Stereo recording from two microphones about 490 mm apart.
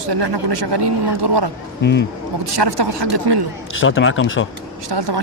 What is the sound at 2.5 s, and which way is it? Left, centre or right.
Speech, right.